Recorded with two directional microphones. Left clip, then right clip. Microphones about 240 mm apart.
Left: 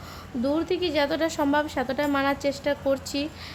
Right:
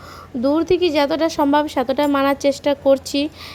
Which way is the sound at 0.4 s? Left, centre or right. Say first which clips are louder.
Right 9 dB; right.